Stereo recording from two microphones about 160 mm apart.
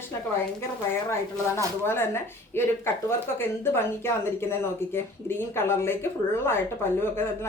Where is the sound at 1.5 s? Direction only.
15° left (ahead or behind).